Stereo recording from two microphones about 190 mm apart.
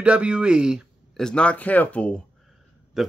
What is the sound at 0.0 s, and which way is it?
A man's voice, 5° right (ahead or behind).